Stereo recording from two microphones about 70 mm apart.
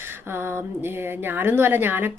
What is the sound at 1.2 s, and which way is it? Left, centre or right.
Speech, right.